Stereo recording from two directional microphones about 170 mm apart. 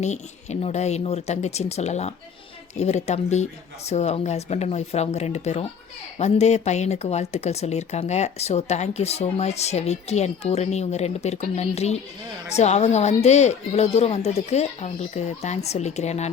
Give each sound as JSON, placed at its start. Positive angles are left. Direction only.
{"t": 0.0, "sound": "speech", "side_deg": 40}